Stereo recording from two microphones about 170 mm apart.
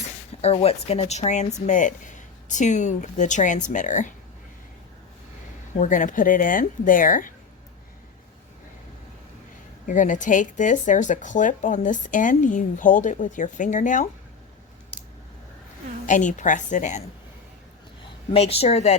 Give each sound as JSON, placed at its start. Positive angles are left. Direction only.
{"t": 0.4, "sound": "speech", "side_deg": 35}
{"t": 5.7, "sound": "speech", "side_deg": 50}
{"t": 9.8, "sound": "speech", "side_deg": 50}
{"t": 16.0, "sound": "speech", "side_deg": 45}
{"t": 18.3, "sound": "speech", "side_deg": 35}